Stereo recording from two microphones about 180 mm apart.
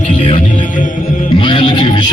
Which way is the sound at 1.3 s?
25° left (ahead or behind).